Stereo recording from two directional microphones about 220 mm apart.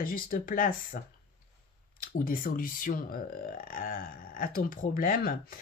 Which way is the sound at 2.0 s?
40° left (ahead or behind).